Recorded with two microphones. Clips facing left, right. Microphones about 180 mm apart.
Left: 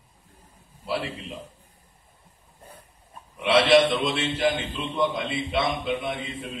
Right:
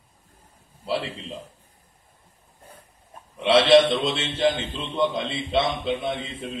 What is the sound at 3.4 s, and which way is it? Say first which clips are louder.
A man's voice: right 2 dB; 25° right (ahead or behind).